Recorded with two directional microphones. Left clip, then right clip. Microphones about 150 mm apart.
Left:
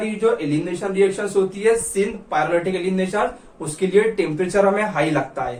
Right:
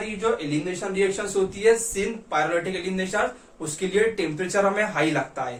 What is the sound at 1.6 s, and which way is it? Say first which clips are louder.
Speech: right 1 dB; centre (ahead or behind).